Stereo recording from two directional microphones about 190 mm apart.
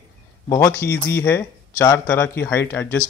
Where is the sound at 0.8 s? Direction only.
55° left (ahead or behind).